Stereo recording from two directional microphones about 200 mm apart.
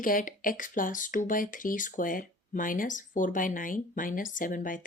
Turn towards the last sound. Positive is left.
turn(degrees=40)  # may be behind; listen again after turning